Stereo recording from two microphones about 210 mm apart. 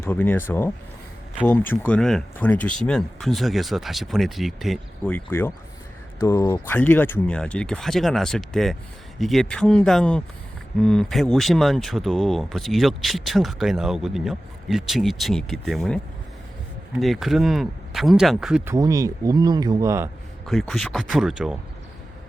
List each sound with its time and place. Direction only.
0.0 s speech: 10° left (ahead or behind)
17.0 s speech: centre (ahead or behind)
18.7 s speech: 15° right (ahead or behind)
20.5 s speech: centre (ahead or behind)